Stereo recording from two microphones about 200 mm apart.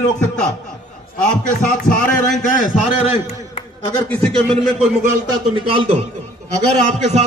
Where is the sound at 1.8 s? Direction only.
45° left (ahead or behind).